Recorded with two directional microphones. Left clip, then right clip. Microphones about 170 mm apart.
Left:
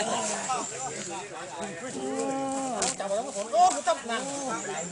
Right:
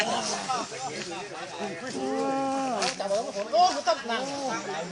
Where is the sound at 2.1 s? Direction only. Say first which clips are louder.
Right 3 dB; centre (ahead or behind).